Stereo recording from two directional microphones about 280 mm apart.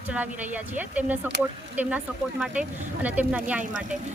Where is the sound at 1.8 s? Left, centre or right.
Centre.